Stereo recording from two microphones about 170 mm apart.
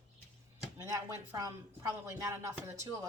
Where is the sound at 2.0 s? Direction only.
20° right (ahead or behind).